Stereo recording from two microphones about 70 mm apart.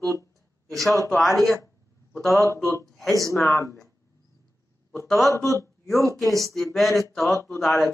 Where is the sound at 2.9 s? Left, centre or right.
Centre.